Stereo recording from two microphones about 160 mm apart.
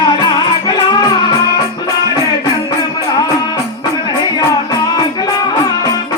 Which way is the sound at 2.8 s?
25° left (ahead or behind).